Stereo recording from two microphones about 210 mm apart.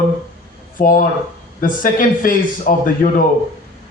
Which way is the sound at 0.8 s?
40° left (ahead or behind).